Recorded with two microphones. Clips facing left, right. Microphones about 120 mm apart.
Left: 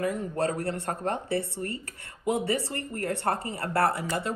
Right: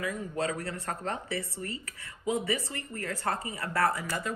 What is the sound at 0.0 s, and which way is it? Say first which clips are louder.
Speech: left 4 dB; 60° left (ahead or behind).